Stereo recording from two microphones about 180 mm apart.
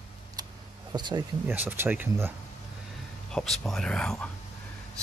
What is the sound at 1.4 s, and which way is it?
Speech, 10° right (ahead or behind).